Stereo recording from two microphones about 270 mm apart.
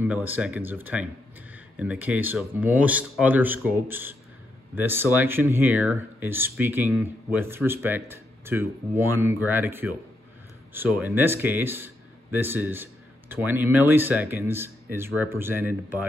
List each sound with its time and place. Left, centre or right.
0.0 s a man's voice: centre